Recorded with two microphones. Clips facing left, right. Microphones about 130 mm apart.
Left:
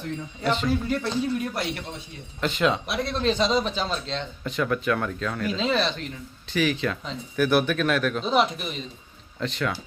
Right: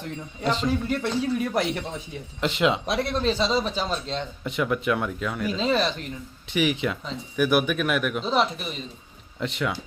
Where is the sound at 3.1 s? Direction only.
10° right (ahead or behind).